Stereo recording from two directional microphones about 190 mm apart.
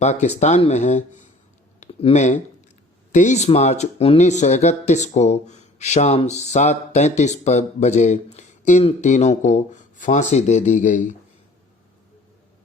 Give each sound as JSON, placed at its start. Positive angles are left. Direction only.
{"t": 0.0, "sound": "speech", "side_deg": 35}